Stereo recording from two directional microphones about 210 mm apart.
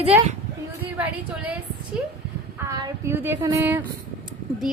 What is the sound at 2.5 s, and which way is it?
Speech, 10° right (ahead or behind).